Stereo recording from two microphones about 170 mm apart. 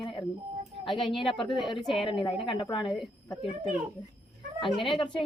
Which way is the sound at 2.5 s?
25° left (ahead or behind).